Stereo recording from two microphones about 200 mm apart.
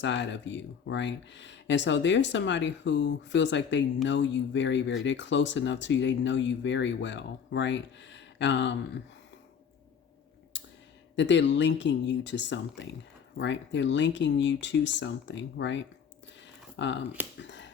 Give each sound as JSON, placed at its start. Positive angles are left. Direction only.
{"t": 0.0, "sound": "speech", "side_deg": 65}
{"t": 11.2, "sound": "speech", "side_deg": 65}
{"t": 17.4, "sound": "a sound", "side_deg": 65}